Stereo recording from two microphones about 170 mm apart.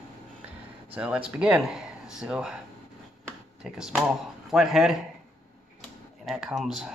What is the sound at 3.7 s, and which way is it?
Speech, 5° right (ahead or behind).